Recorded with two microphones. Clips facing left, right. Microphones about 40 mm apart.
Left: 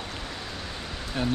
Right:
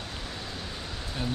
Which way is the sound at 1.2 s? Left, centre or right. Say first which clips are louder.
Left 5 dB; left.